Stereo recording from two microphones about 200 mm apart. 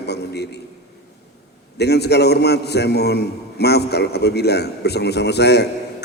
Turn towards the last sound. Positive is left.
turn(degrees=55)  # may be behind; listen again after turning